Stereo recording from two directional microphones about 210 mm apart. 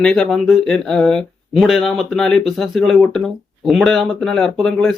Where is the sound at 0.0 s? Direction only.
Centre (ahead or behind).